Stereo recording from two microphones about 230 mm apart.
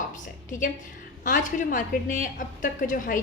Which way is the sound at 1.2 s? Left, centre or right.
Left.